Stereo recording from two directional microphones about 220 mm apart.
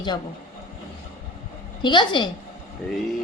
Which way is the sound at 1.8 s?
20° left (ahead or behind).